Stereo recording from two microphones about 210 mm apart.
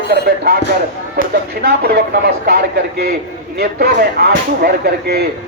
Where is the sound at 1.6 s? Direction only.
50° right (ahead or behind).